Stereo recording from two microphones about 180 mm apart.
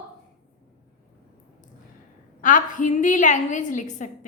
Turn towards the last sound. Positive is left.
turn(degrees=45)  # may be behind; listen again after turning